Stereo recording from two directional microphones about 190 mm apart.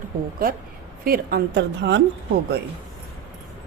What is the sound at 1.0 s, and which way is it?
A woman's voice, 55° right (ahead or behind).